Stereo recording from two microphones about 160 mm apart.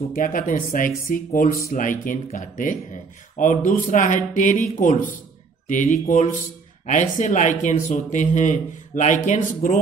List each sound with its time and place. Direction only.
0.1 s speech: 60° left (ahead or behind)